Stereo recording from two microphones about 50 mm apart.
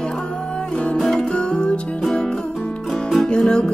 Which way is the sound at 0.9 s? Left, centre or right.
Centre.